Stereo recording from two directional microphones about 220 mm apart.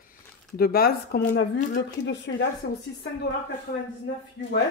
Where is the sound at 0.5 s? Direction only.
45° left (ahead or behind).